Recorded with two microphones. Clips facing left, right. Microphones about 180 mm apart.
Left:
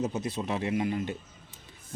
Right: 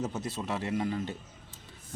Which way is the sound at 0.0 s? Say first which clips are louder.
Left 3 dB; 15° left (ahead or behind).